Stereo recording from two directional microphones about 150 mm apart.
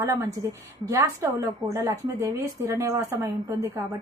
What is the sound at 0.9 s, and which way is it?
A woman's voice, 20° right (ahead or behind).